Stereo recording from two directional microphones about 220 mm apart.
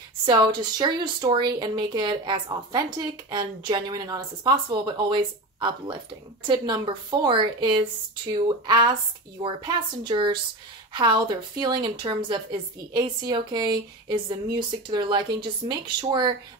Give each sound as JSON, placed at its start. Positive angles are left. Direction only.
{"t": 0.2, "sound": "a woman's voice", "side_deg": -20}